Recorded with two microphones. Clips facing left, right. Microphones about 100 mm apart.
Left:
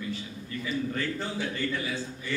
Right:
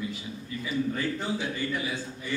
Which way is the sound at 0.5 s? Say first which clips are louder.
Left 1 dB; 10° right (ahead or behind).